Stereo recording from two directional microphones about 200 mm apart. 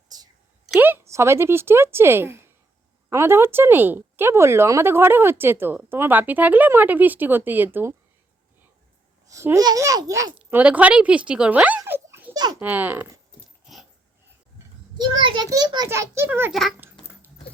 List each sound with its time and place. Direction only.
0.7 s speech: 10° right (ahead or behind)
9.2 s speech: 15° right (ahead or behind)
11.8 s a sound: 15° right (ahead or behind)
12.5 s speech: 10° right (ahead or behind)
15.0 s a child's voice: 20° right (ahead or behind)